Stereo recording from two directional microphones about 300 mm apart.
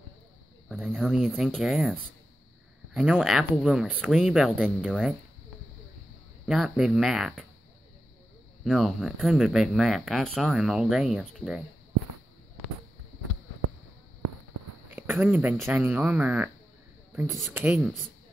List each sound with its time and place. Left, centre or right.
0.7 s speech: centre
6.4 s speech: centre
8.6 s speech: centre
14.9 s a sound: centre
15.6 s speech: centre